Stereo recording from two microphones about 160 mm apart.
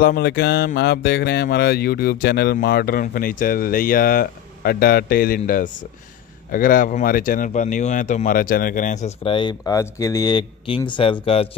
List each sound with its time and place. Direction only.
0.0 s mantra: 80° left
0.7 s speech: 90° left; by 11.4 s 35° left (ahead or behind)